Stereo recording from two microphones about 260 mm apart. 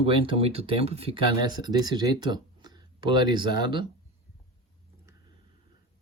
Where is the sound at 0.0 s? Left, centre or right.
Right.